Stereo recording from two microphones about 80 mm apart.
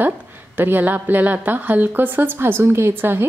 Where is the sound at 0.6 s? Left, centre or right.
Right.